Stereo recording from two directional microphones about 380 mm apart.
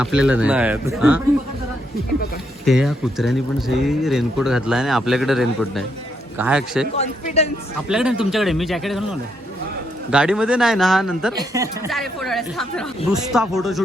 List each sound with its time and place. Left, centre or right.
0.0 s speech: centre
2.6 s speech: centre
7.0 s speech: centre
7.9 s speech: centre
10.1 s speech: centre